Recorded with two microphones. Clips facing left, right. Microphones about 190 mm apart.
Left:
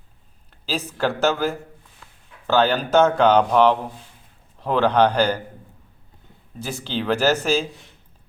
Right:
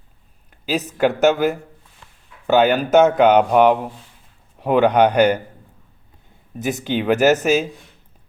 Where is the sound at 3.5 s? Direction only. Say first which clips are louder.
Right 3 dB; 15° right (ahead or behind).